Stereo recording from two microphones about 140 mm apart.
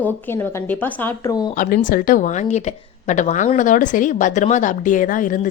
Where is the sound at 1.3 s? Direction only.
25° left (ahead or behind).